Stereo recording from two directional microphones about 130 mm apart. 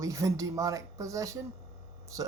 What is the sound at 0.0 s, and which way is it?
A woman's voice, 25° right (ahead or behind).